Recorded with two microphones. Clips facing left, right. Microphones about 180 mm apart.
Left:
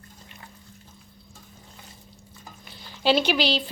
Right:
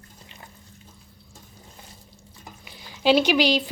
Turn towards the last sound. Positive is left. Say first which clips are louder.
# right 3 dB
turn(degrees=-10)  # may be behind; listen again after turning